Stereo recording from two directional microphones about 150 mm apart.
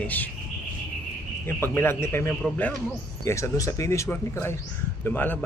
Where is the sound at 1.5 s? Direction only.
15° left (ahead or behind).